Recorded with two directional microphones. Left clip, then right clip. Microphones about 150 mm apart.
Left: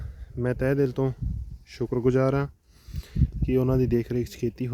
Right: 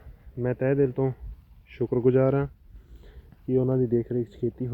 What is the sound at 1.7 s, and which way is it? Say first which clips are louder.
Speech: right 2 dB; 20° left (ahead or behind).